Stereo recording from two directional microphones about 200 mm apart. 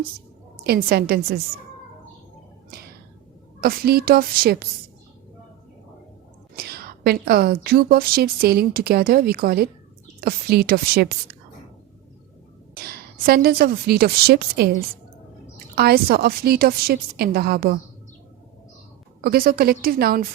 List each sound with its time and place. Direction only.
0.6 s a woman's voice: 50° right (ahead or behind)
3.6 s a woman's voice: 50° right (ahead or behind)
6.6 s a woman's voice: 50° right (ahead or behind)
12.7 s a woman's voice: 50° right (ahead or behind)
19.2 s a woman's voice: 50° right (ahead or behind)